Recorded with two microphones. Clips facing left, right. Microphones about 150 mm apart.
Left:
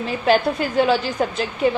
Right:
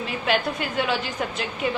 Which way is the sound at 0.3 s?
35° left (ahead or behind).